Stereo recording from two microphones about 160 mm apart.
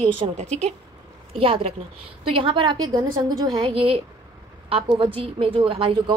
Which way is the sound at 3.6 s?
35° right (ahead or behind).